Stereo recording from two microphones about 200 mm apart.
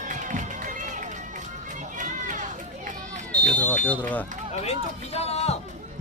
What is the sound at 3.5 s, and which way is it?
Smoke detector, 5° left (ahead or behind).